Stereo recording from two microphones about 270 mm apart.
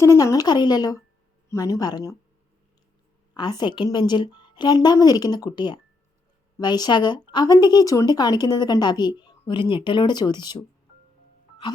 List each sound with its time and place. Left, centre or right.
0.0 s speech: centre
3.3 s speech: centre